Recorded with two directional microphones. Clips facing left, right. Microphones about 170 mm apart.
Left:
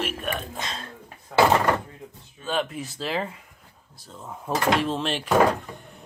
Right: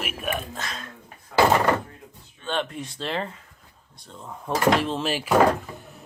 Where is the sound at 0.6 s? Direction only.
30° left (ahead or behind).